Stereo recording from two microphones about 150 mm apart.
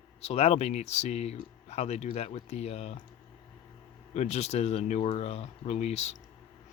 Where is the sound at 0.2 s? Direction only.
40° left (ahead or behind).